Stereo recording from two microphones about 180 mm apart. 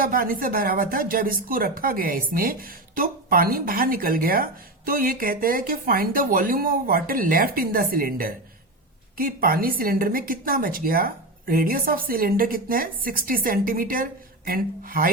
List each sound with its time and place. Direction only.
0.0 s a woman's voice: 55° right (ahead or behind)